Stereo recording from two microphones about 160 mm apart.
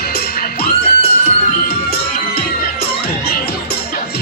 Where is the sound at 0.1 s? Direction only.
80° left.